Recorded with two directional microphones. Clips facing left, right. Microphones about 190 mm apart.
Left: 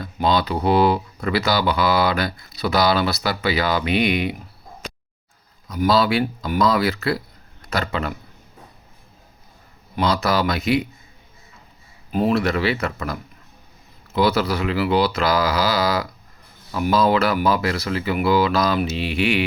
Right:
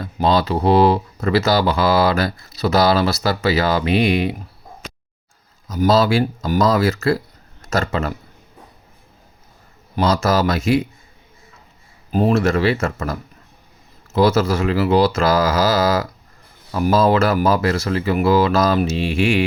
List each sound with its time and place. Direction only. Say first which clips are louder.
0.0 s speech: right 3 dB; 30° right (ahead or behind)
5.6 s speech: right 3 dB; 40° right (ahead or behind)
9.9 s speech: right 3 dB; 40° right (ahead or behind)
12.1 s speech: right 3 dB; 40° right (ahead or behind)